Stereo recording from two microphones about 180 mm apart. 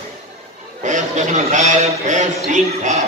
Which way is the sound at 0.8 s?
40° right (ahead or behind).